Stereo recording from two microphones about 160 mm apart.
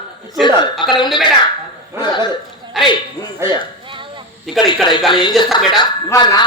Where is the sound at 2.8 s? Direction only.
Centre (ahead or behind).